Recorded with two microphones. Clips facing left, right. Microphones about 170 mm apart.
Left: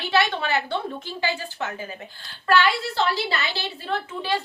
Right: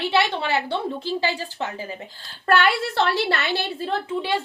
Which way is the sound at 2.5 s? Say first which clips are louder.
Right 1 dB; 60° right (ahead or behind).